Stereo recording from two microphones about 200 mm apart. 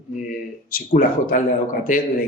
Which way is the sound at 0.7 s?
45° left (ahead or behind).